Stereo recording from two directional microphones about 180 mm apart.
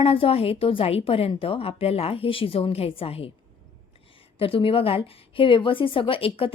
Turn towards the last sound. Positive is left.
turn(degrees=30)  # may be behind; listen again after turning